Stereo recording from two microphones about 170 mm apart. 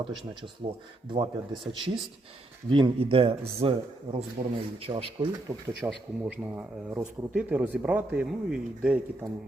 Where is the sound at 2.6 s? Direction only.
30° right (ahead or behind).